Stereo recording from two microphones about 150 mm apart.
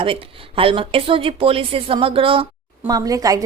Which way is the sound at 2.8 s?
25° right (ahead or behind).